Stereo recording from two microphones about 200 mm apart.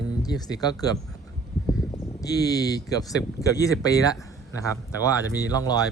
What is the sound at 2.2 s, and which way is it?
Speech, 20° left (ahead or behind).